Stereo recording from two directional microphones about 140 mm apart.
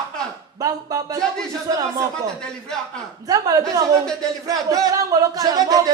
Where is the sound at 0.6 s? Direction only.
25° right (ahead or behind).